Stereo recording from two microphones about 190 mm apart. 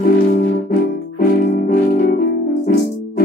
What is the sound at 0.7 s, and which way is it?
Music, 50° left (ahead or behind).